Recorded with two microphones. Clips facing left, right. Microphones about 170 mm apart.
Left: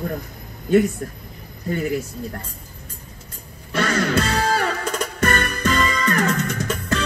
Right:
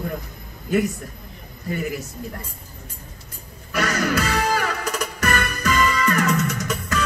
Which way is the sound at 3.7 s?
30° left (ahead or behind).